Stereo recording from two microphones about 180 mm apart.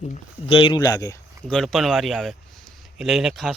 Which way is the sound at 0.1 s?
30° left (ahead or behind).